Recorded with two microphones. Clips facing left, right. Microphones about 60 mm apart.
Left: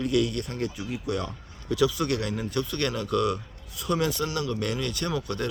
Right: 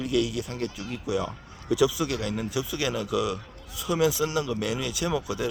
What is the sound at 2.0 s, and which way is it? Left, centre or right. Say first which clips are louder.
A man's voice: left 1 dB; centre.